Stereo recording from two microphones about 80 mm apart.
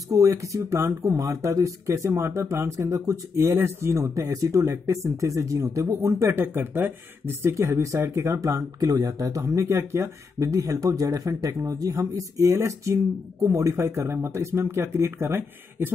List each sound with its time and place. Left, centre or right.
0.1 s speech: right
6.4 s speech: right